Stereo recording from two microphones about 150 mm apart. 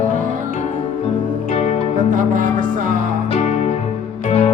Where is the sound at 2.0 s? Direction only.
60° right (ahead or behind).